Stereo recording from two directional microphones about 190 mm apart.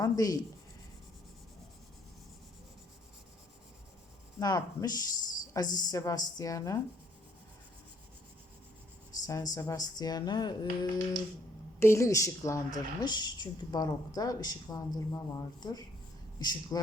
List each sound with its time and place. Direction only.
0.0 s a woman's voice: 20° left (ahead or behind)
4.4 s a woman's voice: 20° left (ahead or behind)
9.2 s a woman's voice: 20° left (ahead or behind)